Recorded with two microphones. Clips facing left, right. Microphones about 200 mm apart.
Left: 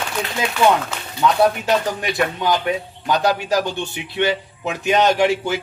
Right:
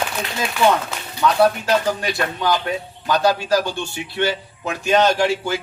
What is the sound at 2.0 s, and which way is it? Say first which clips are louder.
A man's voice: left 2 dB; 20° left (ahead or behind).